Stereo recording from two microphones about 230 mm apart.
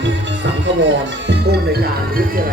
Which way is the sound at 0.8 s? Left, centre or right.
Right.